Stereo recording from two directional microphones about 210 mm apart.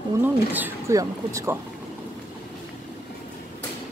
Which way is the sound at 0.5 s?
10° right (ahead or behind).